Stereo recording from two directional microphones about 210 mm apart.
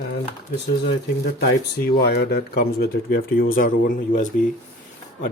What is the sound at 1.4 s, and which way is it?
Speech, 50° left (ahead or behind).